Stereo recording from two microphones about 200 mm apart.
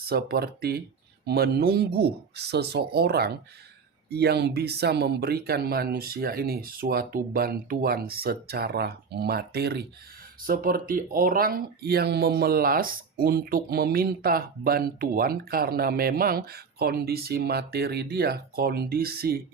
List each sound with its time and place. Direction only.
0.1 s speech: 50° right (ahead or behind)